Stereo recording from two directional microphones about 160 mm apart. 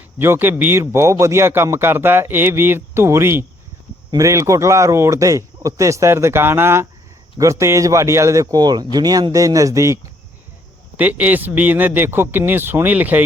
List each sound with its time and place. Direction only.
0.2 s a man's voice: 15° right (ahead or behind)